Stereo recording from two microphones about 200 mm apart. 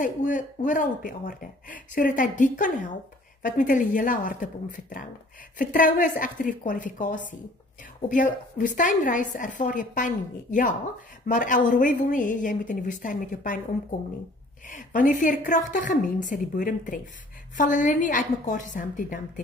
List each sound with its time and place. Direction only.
0.0 s speech: 40° left (ahead or behind)
14.7 s speech: 40° left (ahead or behind)